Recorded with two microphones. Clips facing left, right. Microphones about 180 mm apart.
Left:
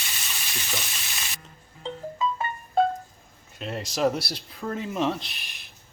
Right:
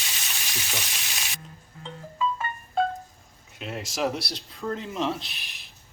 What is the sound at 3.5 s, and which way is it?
Speech, centre (ahead or behind).